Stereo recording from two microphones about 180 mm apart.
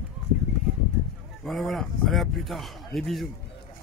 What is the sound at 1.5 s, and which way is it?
Speech, centre (ahead or behind).